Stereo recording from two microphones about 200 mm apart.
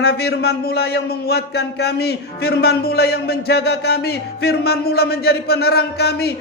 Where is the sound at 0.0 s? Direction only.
55° left (ahead or behind).